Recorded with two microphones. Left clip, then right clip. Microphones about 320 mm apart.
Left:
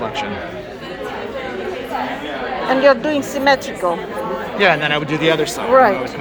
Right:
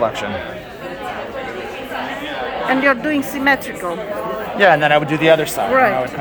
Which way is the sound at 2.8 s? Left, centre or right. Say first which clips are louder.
Left 3 dB; centre.